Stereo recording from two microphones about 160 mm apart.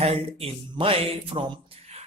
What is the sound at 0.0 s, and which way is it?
Speech, 35° right (ahead or behind).